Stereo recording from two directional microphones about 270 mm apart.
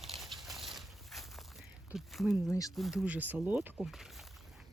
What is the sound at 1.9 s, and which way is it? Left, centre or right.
Speech, centre.